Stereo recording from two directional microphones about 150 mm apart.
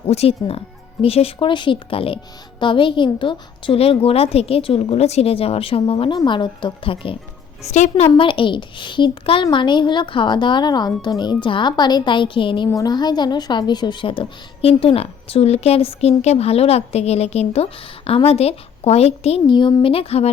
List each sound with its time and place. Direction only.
0.1 s a woman's voice: 40° left (ahead or behind)
7.6 s a woman's voice: 50° left (ahead or behind)
8.1 s a woman's voice: 35° left (ahead or behind)